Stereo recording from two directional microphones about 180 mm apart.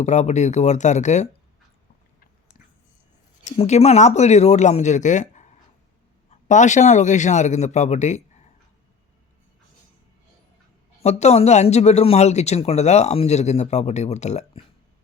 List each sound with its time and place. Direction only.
0.0 s speech: 40° left (ahead or behind)
3.4 s speech: 35° left (ahead or behind)
11.0 s speech: 35° left (ahead or behind)